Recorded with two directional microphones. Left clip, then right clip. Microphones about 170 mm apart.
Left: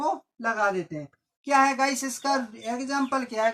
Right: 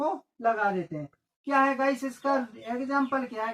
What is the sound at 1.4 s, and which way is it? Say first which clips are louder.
Speech: left 3 dB; 40° left (ahead or behind).